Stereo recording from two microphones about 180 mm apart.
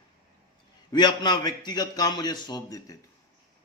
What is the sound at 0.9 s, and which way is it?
A man's voice, 25° left (ahead or behind).